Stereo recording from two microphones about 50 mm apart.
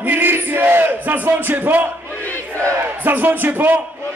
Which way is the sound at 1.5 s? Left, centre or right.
Right.